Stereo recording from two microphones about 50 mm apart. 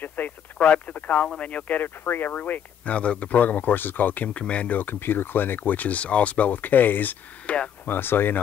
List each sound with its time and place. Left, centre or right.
0.0 s speech: left
1.8 s speech: left
4.7 s speech: left
7.4 s speech: left
7.8 s speech: left